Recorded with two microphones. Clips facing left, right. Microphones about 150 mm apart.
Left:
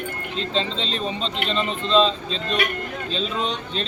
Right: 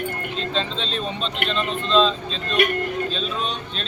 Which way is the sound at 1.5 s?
20° left (ahead or behind).